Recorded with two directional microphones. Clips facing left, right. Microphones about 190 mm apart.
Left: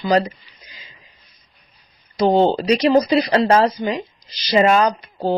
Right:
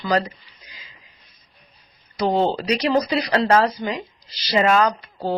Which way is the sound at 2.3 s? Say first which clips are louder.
Left 5 dB; 25° left (ahead or behind).